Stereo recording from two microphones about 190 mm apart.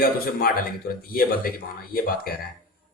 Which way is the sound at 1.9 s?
50° left (ahead or behind).